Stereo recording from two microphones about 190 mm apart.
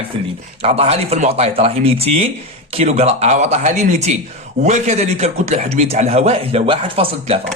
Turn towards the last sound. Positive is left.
turn(degrees=-30)  # may be behind; listen again after turning